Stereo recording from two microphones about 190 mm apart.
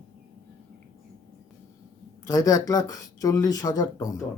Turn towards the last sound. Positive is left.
turn(degrees=20)  # may be behind; listen again after turning